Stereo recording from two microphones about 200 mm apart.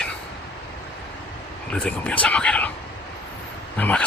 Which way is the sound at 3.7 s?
10° left (ahead or behind).